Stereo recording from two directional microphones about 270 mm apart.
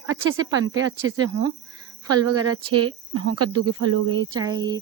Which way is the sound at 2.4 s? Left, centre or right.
Right.